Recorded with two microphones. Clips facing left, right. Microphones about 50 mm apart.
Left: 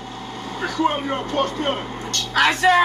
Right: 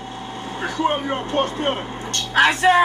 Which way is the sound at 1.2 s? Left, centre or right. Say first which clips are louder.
Right 1 dB; right.